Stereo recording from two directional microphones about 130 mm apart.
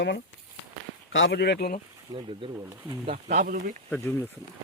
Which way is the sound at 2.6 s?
20° right (ahead or behind).